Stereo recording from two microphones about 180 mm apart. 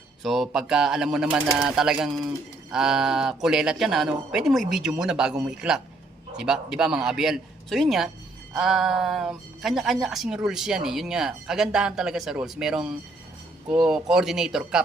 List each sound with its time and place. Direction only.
0.2 s a woman's voice: centre (ahead or behind)